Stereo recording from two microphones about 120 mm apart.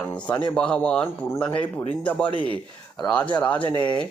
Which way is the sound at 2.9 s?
10° left (ahead or behind).